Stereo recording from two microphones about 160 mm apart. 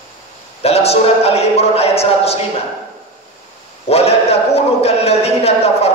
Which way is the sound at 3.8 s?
40° left (ahead or behind).